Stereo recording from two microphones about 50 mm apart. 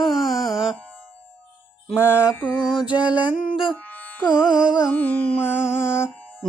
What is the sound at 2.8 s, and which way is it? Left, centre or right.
Music, right.